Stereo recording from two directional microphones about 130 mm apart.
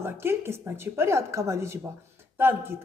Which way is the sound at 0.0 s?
20° right (ahead or behind).